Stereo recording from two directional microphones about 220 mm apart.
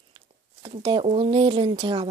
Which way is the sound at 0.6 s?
20° right (ahead or behind).